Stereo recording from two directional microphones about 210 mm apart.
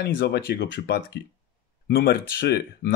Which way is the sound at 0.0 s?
50° left (ahead or behind).